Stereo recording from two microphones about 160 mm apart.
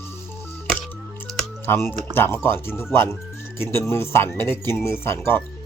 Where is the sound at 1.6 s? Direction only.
15° left (ahead or behind).